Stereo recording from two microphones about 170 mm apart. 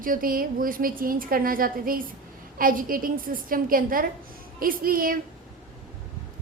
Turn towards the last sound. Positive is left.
turn(degrees=-55)  # may be behind; listen again after turning